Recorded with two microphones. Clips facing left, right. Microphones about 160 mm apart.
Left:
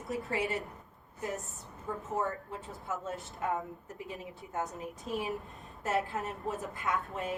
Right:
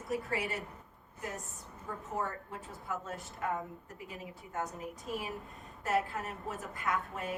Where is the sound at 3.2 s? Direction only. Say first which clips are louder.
Left 1 dB; centre (ahead or behind).